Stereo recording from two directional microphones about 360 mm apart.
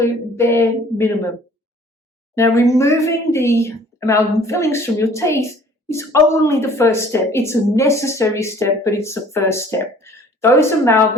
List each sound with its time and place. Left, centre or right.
0.0 s a woman's voice: centre
2.3 s a woman's voice: centre